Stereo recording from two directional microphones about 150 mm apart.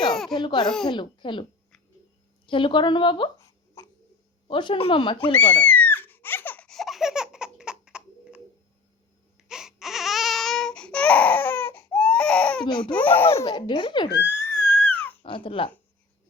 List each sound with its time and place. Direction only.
0.1 s a sound: 5° left (ahead or behind)
0.3 s speech: 30° left (ahead or behind)
2.5 s speech: 35° left (ahead or behind)
3.8 s a sound: 20° left (ahead or behind)
4.4 s speech: 35° left (ahead or behind)
5.3 s laughter: 10° left (ahead or behind); by 8.4 s 5° right (ahead or behind)
9.4 s baby cry: 5° right (ahead or behind)
12.6 s speech: 30° left (ahead or behind)
12.9 s speech: 10° left (ahead or behind)
13.5 s speech: 30° left (ahead or behind)
14.3 s a sound: 15° left (ahead or behind)
15.2 s speech: 35° left (ahead or behind)